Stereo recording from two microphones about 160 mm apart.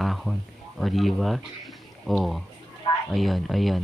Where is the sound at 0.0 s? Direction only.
Centre (ahead or behind).